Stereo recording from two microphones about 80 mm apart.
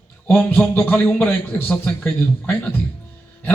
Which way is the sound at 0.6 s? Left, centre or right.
Left.